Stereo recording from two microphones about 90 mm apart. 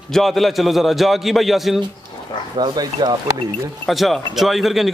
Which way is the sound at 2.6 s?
50° right (ahead or behind).